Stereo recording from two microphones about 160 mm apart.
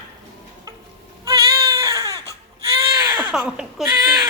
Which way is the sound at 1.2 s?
20° right (ahead or behind).